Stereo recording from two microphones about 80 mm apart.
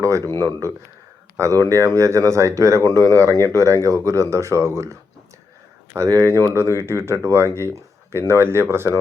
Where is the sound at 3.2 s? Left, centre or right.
Left.